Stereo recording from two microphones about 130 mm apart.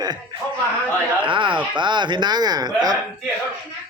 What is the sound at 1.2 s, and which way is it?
Speech, 40° right (ahead or behind).